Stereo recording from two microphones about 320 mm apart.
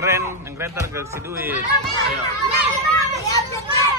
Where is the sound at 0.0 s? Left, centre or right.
Centre.